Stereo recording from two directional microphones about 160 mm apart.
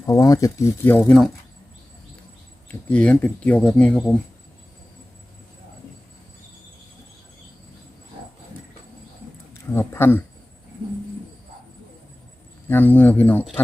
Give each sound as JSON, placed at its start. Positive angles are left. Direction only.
{"t": 0.0, "sound": "speech", "side_deg": 20}
{"t": 2.9, "sound": "speech", "side_deg": 10}
{"t": 9.7, "sound": "speech", "side_deg": 15}
{"t": 12.6, "sound": "speech", "side_deg": 10}